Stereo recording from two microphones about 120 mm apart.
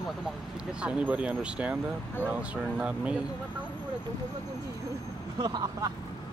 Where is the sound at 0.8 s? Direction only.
10° right (ahead or behind).